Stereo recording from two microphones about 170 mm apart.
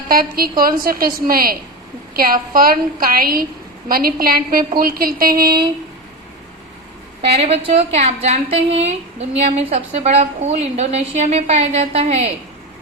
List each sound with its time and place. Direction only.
0.1 s a woman's voice: 60° right (ahead or behind)
7.4 s a woman's voice: 35° right (ahead or behind)